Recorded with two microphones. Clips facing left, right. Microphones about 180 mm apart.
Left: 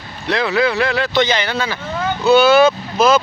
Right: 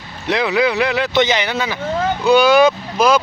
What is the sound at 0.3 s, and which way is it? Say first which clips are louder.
Speech: even; 20° right (ahead or behind).